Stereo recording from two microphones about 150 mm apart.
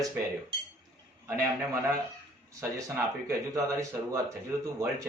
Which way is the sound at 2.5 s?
20° right (ahead or behind).